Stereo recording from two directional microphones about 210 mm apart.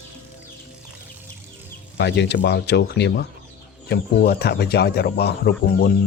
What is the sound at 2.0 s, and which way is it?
Speech, 55° left (ahead or behind).